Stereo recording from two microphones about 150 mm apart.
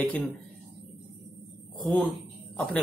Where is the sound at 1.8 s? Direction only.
10° left (ahead or behind).